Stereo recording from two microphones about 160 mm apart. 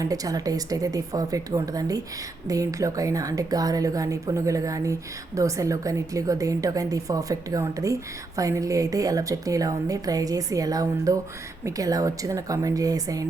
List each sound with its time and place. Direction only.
0.0 s speech: 20° right (ahead or behind)